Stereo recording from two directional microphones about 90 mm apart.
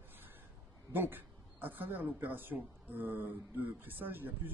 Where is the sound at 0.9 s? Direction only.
20° right (ahead or behind).